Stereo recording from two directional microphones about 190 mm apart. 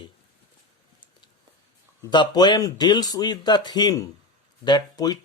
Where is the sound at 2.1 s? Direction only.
25° left (ahead or behind).